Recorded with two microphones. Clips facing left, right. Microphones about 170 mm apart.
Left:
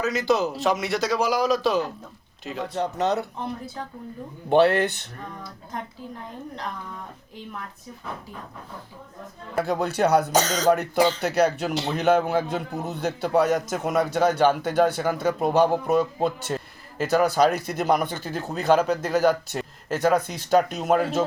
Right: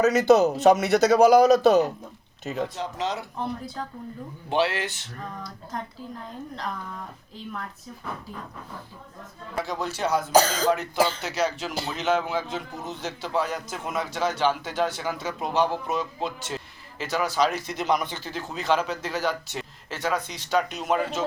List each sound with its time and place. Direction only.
0.0 s a man's voice: 45° right (ahead or behind)
2.7 s speech: 60° left (ahead or behind)
4.4 s speech: 60° left (ahead or behind)
9.6 s speech: 55° left (ahead or behind)
10.3 s speech: 5° right (ahead or behind)
10.7 s speech: 60° left (ahead or behind)
13.5 s speech: 45° left (ahead or behind)
13.8 s speech: 60° left (ahead or behind)